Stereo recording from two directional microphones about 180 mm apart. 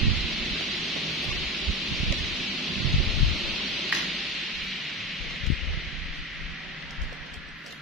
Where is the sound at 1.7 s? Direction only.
Centre (ahead or behind).